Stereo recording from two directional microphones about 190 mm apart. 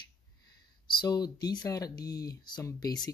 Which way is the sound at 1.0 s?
20° left (ahead or behind).